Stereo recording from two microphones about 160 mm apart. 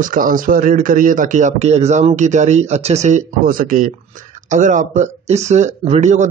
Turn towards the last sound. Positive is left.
turn(degrees=-50)  # may be behind; listen again after turning